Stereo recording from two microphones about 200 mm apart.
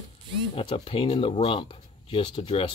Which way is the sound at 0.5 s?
25° left (ahead or behind).